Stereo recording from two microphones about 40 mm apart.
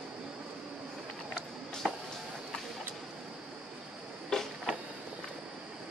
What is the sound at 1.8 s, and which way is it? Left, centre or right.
Walk, right.